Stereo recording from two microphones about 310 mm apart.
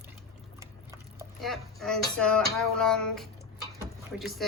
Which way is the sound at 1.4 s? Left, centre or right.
Centre.